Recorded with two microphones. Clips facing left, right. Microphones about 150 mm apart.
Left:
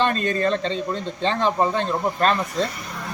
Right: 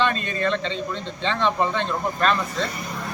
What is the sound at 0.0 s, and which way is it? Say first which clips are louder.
Speech: left 2 dB; 40° left (ahead or behind).